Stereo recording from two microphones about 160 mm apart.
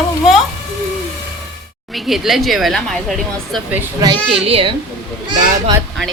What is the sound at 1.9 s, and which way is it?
A woman's voice, centre (ahead or behind).